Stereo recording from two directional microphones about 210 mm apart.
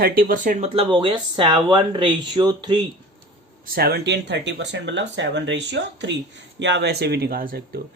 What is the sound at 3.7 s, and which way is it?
Speech, 50° right (ahead or behind).